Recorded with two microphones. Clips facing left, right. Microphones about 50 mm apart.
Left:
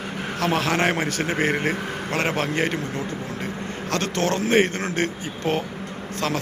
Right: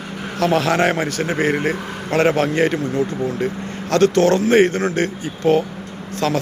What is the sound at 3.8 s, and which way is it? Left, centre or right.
A man's voice, centre.